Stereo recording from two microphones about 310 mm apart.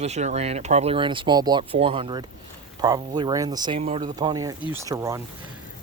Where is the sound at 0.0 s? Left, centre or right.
Right.